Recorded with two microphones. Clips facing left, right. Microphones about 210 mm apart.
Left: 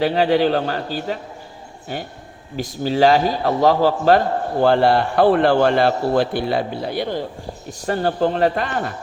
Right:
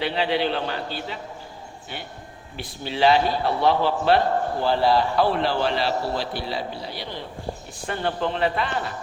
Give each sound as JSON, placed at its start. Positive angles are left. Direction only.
{"t": 0.0, "sound": "a man's voice", "side_deg": 45}
{"t": 4.6, "sound": "a man's voice", "side_deg": 55}